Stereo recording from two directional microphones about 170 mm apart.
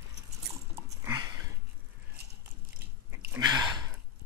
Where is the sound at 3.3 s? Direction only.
25° right (ahead or behind).